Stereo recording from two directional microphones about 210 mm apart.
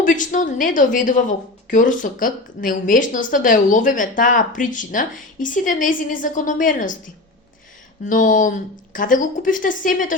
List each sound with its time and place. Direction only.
0.0 s a woman's voice: 40° left (ahead or behind)
8.0 s a woman's voice: 40° left (ahead or behind)